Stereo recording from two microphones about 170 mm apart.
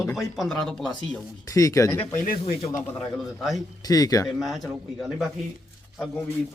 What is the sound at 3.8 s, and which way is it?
Speech, 20° left (ahead or behind).